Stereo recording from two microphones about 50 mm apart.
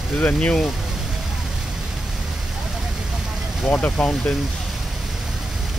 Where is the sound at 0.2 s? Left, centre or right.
Left.